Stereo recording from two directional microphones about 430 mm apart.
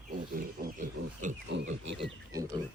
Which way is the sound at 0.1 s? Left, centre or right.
Centre.